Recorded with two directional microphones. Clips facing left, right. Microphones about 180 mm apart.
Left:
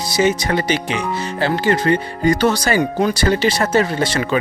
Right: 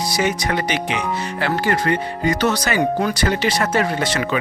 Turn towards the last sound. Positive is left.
turn(degrees=30)  # may be behind; listen again after turning